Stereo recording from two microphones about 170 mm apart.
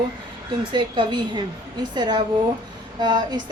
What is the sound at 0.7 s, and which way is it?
A woman's voice, 25° right (ahead or behind).